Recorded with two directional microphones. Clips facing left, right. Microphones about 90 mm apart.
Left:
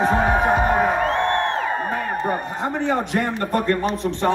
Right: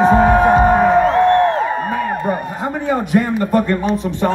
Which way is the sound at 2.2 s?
5° right (ahead or behind).